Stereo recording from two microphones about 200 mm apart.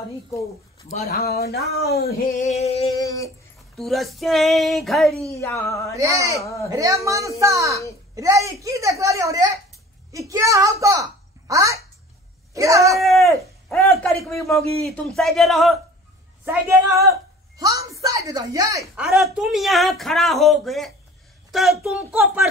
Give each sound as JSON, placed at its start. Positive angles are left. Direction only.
{"t": 1.0, "sound": "speech", "side_deg": 50}
{"t": 2.4, "sound": "music", "side_deg": 35}
{"t": 2.9, "sound": "a sound", "side_deg": 15}
{"t": 3.7, "sound": "speech", "side_deg": 0}
{"t": 5.3, "sound": "a sound", "side_deg": 15}
{"t": 5.9, "sound": "a woman's voice", "side_deg": -15}
{"t": 6.4, "sound": "a sound", "side_deg": 15}
{"t": 6.7, "sound": "a woman's voice", "side_deg": -15}
{"t": 12.9, "sound": "a sound", "side_deg": 0}
{"t": 13.8, "sound": "a man's voice", "side_deg": 0}
{"t": 16.4, "sound": "a woman's voice", "side_deg": -15}
{"t": 18.9, "sound": "speech", "side_deg": 0}